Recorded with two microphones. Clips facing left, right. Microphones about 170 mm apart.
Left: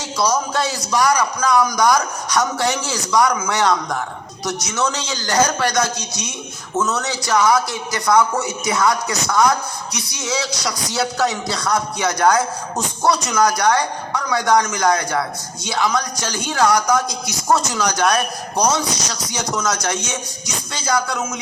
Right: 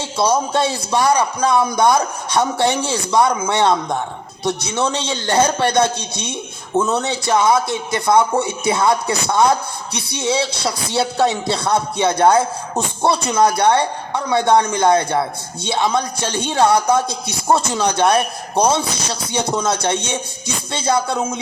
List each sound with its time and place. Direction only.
0.0 s a man's voice: 25° right (ahead or behind)